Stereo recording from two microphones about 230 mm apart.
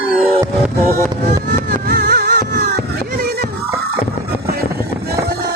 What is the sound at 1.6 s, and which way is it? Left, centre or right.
Music, right.